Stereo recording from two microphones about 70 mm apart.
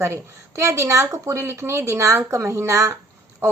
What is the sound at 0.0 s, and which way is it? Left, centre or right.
Speech, right.